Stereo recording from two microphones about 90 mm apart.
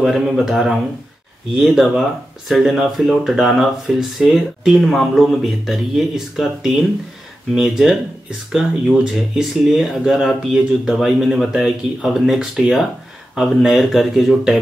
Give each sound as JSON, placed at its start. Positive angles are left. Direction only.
{"t": 0.0, "sound": "speech", "side_deg": 0}